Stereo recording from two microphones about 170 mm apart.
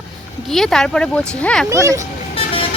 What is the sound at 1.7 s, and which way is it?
Speech, 20° right (ahead or behind).